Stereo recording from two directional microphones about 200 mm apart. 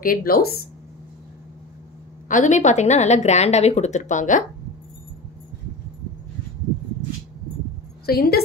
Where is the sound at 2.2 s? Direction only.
40° left (ahead or behind).